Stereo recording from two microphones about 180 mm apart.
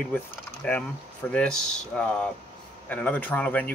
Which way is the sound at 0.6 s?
5° left (ahead or behind).